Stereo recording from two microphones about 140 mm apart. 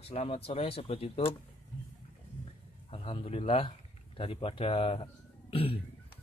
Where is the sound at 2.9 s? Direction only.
40° left (ahead or behind).